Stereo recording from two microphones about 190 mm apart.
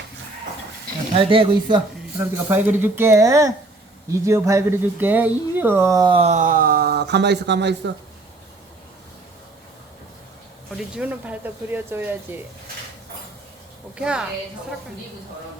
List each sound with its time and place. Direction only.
1.1 s speech: 30° right (ahead or behind)
2.1 s speech: 10° right (ahead or behind); by 7.9 s 65° right (ahead or behind)
10.8 s speech: 5° right (ahead or behind)
13.9 s a woman's voice: 5° right (ahead or behind)